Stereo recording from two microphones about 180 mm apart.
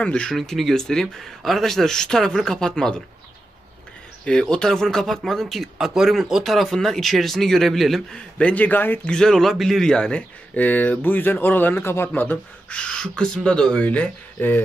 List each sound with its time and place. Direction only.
0.0 s speech: 5° left (ahead or behind)
4.2 s speech: 5° left (ahead or behind)